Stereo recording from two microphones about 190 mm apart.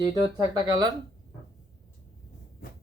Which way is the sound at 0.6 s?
20° right (ahead or behind).